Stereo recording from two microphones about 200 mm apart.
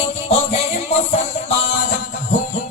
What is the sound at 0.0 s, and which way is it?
Music, 30° left (ahead or behind).